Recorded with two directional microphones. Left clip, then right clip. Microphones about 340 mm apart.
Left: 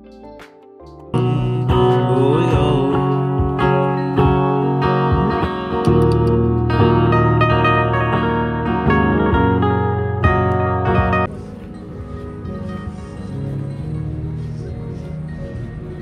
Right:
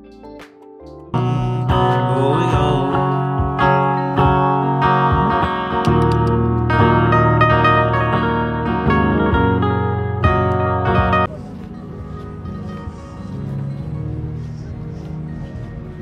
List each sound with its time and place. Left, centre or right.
1.1 s music: centre